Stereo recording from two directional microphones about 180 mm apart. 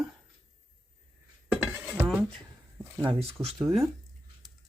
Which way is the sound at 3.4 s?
15° right (ahead or behind).